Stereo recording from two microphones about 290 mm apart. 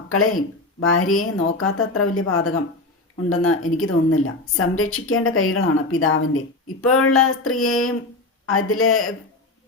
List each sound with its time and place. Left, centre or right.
0.8 s speech: left